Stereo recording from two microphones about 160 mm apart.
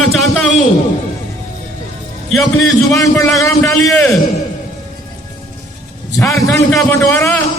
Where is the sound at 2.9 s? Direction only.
15° left (ahead or behind).